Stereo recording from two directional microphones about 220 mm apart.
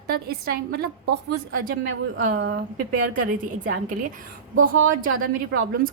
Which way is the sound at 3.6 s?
35° right (ahead or behind).